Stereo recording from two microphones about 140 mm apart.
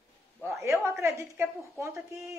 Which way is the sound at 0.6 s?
20° right (ahead or behind).